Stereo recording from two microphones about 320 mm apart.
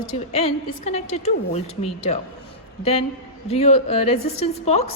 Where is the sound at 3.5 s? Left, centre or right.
Centre.